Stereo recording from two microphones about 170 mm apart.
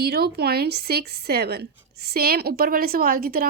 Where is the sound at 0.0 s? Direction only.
65° right (ahead or behind).